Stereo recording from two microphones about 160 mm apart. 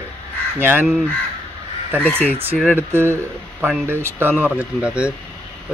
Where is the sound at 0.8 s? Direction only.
Centre (ahead or behind).